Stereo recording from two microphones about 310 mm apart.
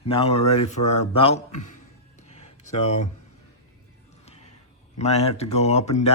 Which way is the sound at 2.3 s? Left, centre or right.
Left.